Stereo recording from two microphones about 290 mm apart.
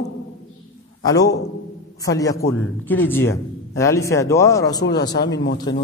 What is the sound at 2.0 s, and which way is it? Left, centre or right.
A man's voice, centre.